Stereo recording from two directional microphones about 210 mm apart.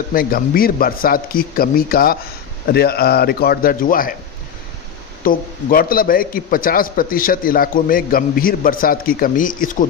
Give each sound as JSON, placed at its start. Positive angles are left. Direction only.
{"t": 0.1, "sound": "a man's voice", "side_deg": 45}
{"t": 5.2, "sound": "a man's voice", "side_deg": 40}